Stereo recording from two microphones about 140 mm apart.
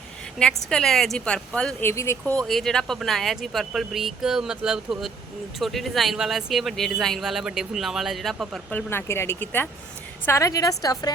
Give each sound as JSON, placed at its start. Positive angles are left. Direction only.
{"t": 0.3, "sound": "speech", "side_deg": 5}
{"t": 1.9, "sound": "speech", "side_deg": 20}
{"t": 2.3, "sound": "speech", "side_deg": 0}
{"t": 8.7, "sound": "a woman's voice", "side_deg": 15}